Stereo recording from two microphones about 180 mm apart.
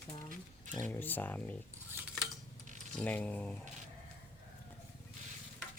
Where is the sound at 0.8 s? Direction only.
10° left (ahead or behind).